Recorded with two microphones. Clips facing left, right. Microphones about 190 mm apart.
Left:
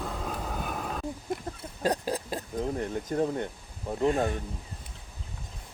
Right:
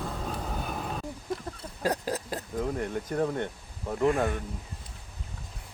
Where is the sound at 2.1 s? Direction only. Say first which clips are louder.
Even; 20° left (ahead or behind).